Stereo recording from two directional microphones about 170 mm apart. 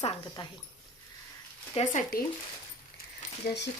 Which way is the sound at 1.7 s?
45° left (ahead or behind).